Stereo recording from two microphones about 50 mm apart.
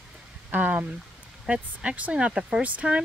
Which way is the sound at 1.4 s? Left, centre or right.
Right.